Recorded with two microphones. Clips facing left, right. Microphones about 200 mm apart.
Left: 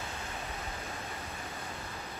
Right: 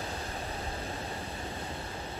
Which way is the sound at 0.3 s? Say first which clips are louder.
Right 3 dB; 30° right (ahead or behind).